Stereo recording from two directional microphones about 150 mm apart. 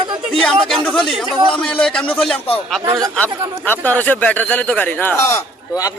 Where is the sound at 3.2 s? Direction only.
10° left (ahead or behind).